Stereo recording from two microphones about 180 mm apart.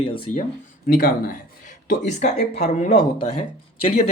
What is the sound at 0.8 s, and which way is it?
Speech, 55° left (ahead or behind).